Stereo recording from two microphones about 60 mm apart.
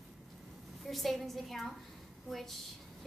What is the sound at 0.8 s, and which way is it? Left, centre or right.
A woman's voice, centre.